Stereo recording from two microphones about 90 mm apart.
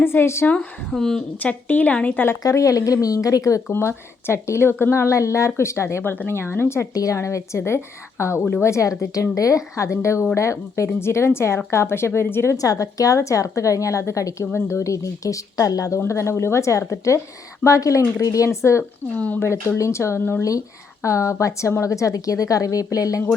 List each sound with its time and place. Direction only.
0.0 s speech: 25° left (ahead or behind)
0.9 s a woman's voice: 5° left (ahead or behind)
1.4 s a woman's voice: 15° left (ahead or behind)
2.4 s a woman's voice: 35° left (ahead or behind)
6.9 s a woman's voice: 40° left (ahead or behind)
12.5 s a woman's voice: 40° left (ahead or behind)
19.1 s a woman's voice: 15° left (ahead or behind)
19.4 s a woman's voice: 30° left (ahead or behind)
20.4 s a woman's voice: 40° left (ahead or behind)